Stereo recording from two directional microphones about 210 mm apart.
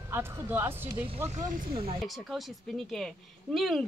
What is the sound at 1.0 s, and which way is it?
Speech, 30° right (ahead or behind).